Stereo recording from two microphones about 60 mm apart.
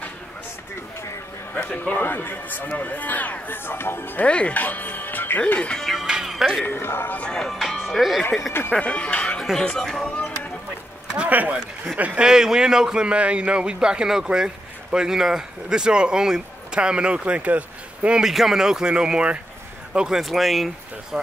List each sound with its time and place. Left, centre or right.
1.6 s speech: left
4.2 s speech: centre
5.6 s speech: centre
6.0 s music: centre
6.6 s speech: left
7.2 s speech: centre
8.7 s speech: centre
9.4 s speech: centre
11.2 s speech: right
12.2 s a man's voice: centre
18.2 s a man's voice: centre
20.2 s speech: centre